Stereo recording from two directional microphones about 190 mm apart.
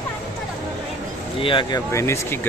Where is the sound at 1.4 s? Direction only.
25° left (ahead or behind).